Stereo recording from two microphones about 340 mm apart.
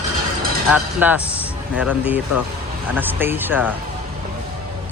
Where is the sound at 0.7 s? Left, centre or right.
Centre.